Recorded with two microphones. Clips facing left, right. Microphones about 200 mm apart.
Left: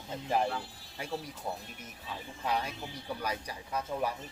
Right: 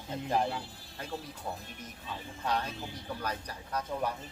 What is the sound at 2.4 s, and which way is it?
A man's voice, 10° left (ahead or behind).